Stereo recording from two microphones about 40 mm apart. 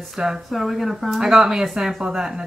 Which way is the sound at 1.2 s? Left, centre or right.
Centre.